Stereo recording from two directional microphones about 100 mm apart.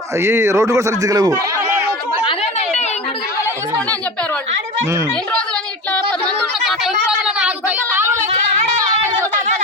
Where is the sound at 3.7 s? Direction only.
10° left (ahead or behind).